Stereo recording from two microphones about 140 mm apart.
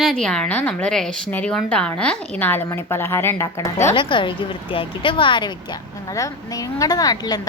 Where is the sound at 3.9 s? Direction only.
35° left (ahead or behind).